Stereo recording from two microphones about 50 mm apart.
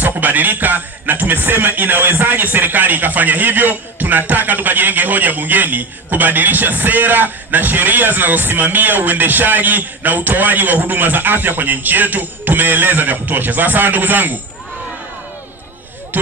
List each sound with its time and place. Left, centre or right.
0.0 s music: right